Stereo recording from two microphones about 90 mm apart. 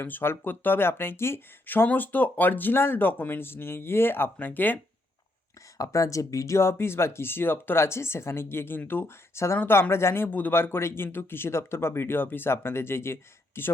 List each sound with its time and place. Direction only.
0.0 s speech: 25° left (ahead or behind)
5.7 s speech: 40° left (ahead or behind)